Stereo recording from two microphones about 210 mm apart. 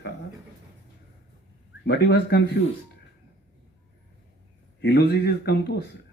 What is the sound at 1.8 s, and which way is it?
Speech, 55° left (ahead or behind).